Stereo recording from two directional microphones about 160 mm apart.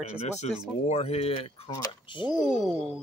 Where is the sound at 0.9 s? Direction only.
40° left (ahead or behind).